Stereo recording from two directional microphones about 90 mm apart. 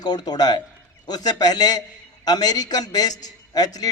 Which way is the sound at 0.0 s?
50° left (ahead or behind).